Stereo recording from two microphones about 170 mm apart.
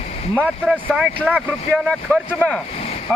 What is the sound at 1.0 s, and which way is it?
Speech, 5° right (ahead or behind).